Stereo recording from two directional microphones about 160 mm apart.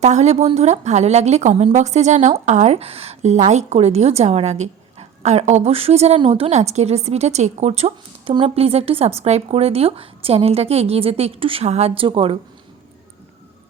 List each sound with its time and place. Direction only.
0.0 s a woman's voice: 45° right (ahead or behind)